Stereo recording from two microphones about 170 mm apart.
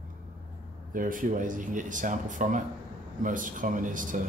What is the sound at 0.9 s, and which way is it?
Speech, 50° right (ahead or behind).